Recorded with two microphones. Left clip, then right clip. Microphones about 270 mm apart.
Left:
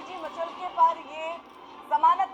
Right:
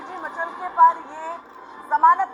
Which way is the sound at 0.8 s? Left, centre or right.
Right.